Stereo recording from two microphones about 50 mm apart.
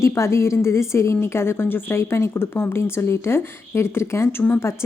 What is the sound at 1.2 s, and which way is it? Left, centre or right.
Speech, left.